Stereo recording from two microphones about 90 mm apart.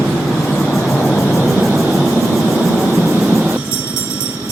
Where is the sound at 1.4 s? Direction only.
5° right (ahead or behind).